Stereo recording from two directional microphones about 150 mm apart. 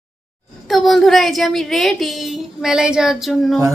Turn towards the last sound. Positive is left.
turn(degrees=0)  # may be behind; listen again after turning